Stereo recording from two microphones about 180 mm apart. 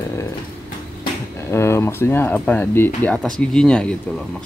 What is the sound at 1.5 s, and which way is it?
Speech, 15° left (ahead or behind).